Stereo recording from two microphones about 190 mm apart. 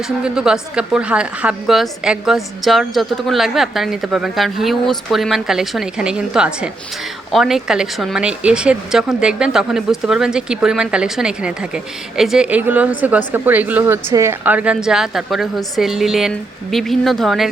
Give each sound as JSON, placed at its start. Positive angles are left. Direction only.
{"t": 0.2, "sound": "a woman's voice", "side_deg": -5}